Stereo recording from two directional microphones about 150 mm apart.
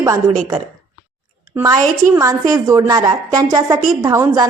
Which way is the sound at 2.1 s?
20° right (ahead or behind).